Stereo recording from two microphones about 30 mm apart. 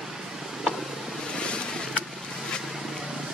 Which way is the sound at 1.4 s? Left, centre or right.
Left.